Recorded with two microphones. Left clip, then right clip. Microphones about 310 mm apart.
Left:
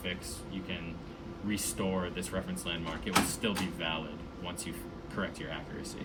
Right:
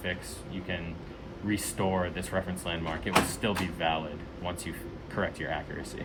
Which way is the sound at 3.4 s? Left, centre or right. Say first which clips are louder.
Right 4 dB; right.